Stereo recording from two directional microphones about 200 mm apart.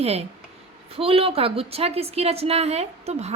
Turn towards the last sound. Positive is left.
turn(degrees=-30)  # may be behind; listen again after turning